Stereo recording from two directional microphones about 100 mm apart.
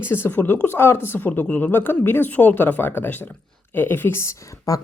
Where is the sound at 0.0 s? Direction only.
25° left (ahead or behind).